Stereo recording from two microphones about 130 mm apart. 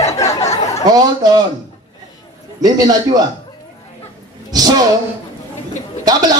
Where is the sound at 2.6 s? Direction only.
30° right (ahead or behind).